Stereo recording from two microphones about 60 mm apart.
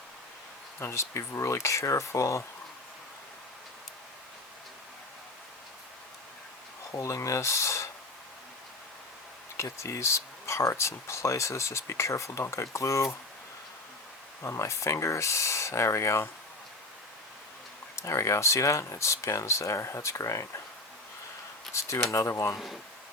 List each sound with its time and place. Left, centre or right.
0.8 s speech: left
6.9 s speech: left
9.6 s speech: left
14.4 s speech: left
17.9 s speech: left
21.7 s speech: left
22.5 s speech: centre